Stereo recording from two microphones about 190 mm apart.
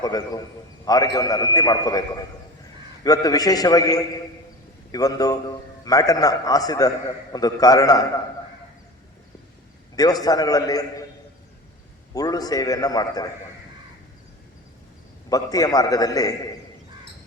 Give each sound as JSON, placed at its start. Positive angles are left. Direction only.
{"t": 0.0, "sound": "a man's voice", "side_deg": 20}
{"t": 9.9, "sound": "a man's voice", "side_deg": 20}
{"t": 12.1, "sound": "a man's voice", "side_deg": 20}
{"t": 15.3, "sound": "a man's voice", "side_deg": 20}